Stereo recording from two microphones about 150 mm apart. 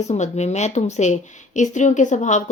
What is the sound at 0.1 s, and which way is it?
Speech, 50° left (ahead or behind).